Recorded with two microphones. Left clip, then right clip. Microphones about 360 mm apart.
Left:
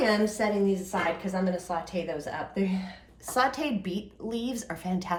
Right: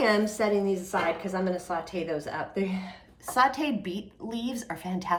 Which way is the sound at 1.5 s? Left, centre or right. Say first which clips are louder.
Even; centre.